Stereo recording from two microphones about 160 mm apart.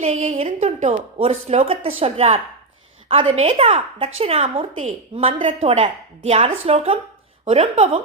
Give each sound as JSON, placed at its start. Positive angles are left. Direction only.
{"t": 0.0, "sound": "a woman's voice", "side_deg": -45}